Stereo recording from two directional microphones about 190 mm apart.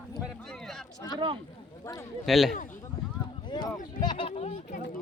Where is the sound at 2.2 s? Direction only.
Centre (ahead or behind).